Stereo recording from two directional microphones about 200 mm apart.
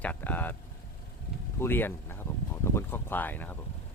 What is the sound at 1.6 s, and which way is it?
Speech, 10° left (ahead or behind).